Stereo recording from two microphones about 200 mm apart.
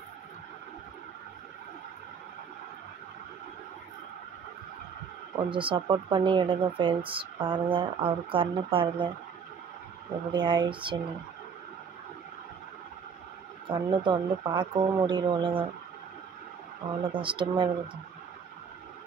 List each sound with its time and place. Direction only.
5.5 s speech: 25° right (ahead or behind)
10.3 s speech: 25° right (ahead or behind)
13.7 s speech: 25° right (ahead or behind)
17.0 s speech: 25° right (ahead or behind)